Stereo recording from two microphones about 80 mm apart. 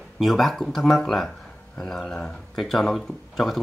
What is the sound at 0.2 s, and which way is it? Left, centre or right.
Speech, centre.